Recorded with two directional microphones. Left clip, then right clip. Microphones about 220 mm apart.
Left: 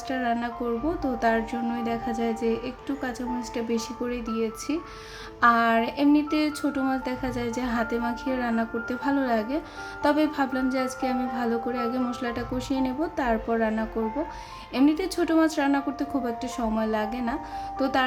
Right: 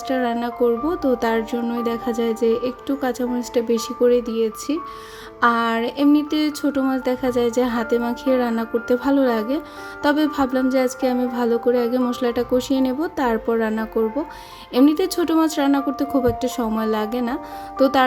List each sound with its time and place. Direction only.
0.1 s speech: 25° right (ahead or behind)
17.7 s music: 25° right (ahead or behind)